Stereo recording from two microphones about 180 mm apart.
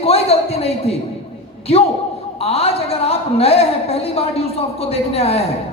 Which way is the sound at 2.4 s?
35° left (ahead or behind).